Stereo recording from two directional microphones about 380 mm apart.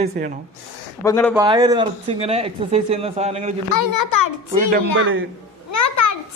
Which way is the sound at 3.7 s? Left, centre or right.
Left.